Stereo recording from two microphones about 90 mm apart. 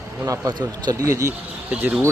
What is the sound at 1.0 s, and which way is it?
Speech, 35° right (ahead or behind).